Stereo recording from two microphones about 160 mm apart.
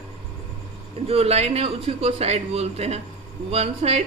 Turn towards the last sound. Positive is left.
turn(degrees=-40)  # may be behind; listen again after turning